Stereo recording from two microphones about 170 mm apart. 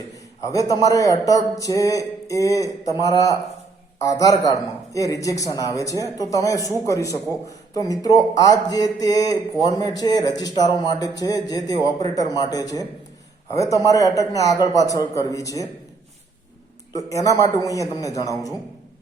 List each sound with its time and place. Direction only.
0.4 s speech: 20° left (ahead or behind)
16.9 s speech: 20° left (ahead or behind)